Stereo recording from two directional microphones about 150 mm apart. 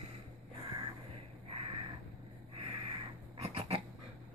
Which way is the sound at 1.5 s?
40° right (ahead or behind).